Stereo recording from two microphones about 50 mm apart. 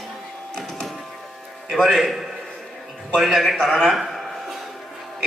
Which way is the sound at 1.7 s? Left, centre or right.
Centre.